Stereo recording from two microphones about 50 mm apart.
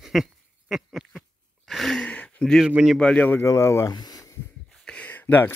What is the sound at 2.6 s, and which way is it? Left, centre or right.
Speech, centre.